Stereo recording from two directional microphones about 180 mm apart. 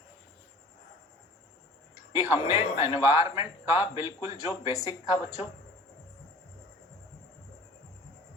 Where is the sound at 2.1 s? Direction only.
30° left (ahead or behind).